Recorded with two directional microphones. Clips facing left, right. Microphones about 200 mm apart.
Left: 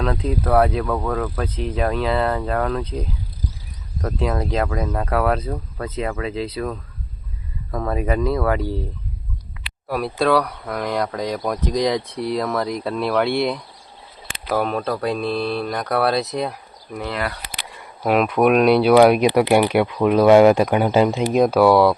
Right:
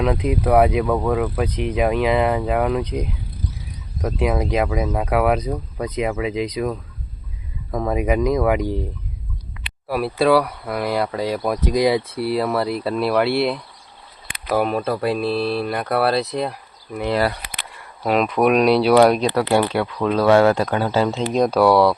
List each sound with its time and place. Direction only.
0.0 s speech: 15° right (ahead or behind)
4.0 s speech: 10° right (ahead or behind)
9.9 s speech: 5° right (ahead or behind)
17.1 s speech: 35° right (ahead or behind)
18.0 s speech: centre (ahead or behind)
19.2 s speech: 15° left (ahead or behind)